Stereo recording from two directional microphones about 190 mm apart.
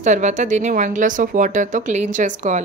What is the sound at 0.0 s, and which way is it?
Speech, 40° right (ahead or behind).